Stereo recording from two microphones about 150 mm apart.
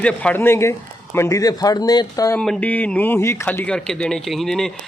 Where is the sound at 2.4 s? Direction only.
5° left (ahead or behind).